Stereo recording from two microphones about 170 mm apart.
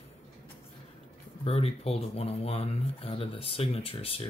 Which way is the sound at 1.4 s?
35° left (ahead or behind).